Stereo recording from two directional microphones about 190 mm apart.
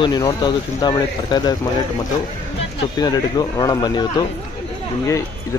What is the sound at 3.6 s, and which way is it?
Speech, 20° left (ahead or behind).